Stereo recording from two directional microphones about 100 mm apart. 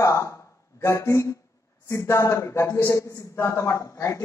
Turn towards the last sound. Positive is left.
turn(degrees=30)  # may be behind; listen again after turning